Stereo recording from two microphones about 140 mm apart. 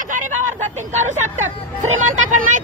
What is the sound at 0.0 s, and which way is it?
Speech, 65° right (ahead or behind).